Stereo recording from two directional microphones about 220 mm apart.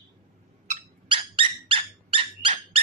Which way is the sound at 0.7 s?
25° right (ahead or behind).